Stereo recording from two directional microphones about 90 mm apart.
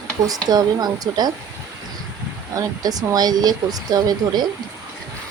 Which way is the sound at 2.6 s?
40° right (ahead or behind).